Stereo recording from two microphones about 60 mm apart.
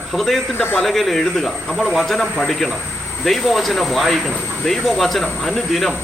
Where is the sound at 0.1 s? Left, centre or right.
Centre.